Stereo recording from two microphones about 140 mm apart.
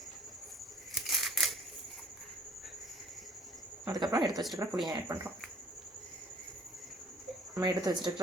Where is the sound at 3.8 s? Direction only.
35° right (ahead or behind).